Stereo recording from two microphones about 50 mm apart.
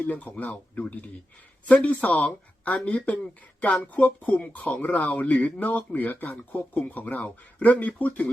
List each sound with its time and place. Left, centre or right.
0.0 s speech: left